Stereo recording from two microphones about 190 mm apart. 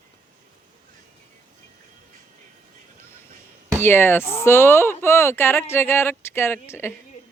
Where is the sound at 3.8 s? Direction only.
10° left (ahead or behind).